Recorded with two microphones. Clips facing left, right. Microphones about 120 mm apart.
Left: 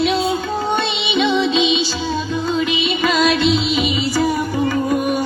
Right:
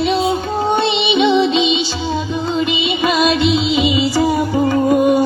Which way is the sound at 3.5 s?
65° right (ahead or behind).